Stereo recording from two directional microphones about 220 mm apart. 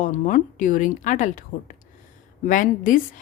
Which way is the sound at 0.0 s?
35° left (ahead or behind).